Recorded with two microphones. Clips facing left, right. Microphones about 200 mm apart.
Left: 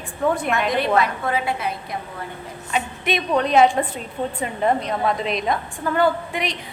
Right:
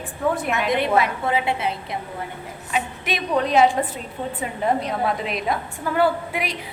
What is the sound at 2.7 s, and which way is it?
A woman's voice, centre (ahead or behind).